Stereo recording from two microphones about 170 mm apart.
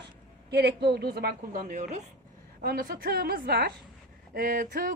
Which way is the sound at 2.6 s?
60° right (ahead or behind).